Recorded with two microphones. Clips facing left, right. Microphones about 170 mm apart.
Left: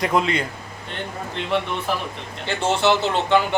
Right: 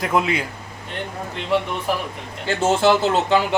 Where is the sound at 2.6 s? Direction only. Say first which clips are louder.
Right 3 dB; 45° right (ahead or behind).